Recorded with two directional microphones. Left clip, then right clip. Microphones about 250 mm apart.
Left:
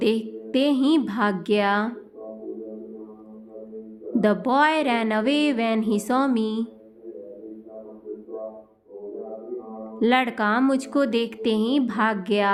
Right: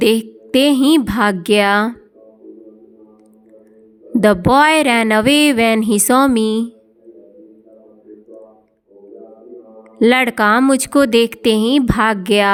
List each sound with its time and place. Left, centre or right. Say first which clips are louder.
0.0 s speech: right 9 dB; right
4.2 s speech: right 9 dB; right
10.0 s speech: right 9 dB; right